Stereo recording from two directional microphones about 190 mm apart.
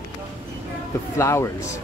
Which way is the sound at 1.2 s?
15° left (ahead or behind).